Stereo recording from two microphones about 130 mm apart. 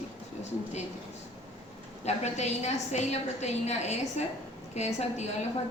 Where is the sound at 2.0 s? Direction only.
60° left (ahead or behind).